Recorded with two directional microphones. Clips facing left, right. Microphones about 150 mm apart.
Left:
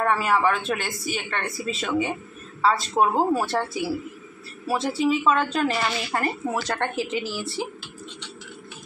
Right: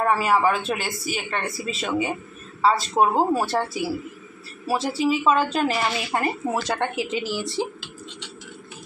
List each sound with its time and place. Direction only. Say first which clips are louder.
0.0 s speech: right 1 dB; 5° right (ahead or behind)
4.6 s speech: even; centre (ahead or behind); by 7.4 s 20° right (ahead or behind)